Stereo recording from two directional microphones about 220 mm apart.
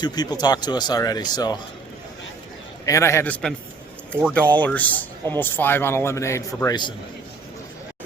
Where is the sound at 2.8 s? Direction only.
15° left (ahead or behind).